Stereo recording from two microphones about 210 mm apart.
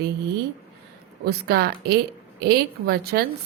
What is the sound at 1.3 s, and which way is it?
A woman's voice, 50° right (ahead or behind).